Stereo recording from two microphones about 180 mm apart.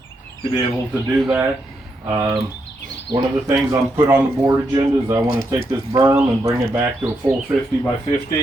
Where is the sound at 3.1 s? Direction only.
25° right (ahead or behind).